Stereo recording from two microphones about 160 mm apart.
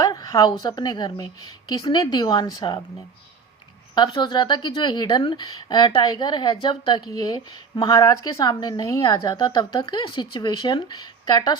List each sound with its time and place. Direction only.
0.0 s speech: 25° left (ahead or behind)
3.9 s speech: 30° left (ahead or behind)